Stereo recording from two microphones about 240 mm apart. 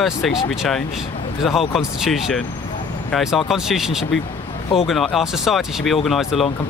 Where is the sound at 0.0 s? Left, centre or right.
Centre.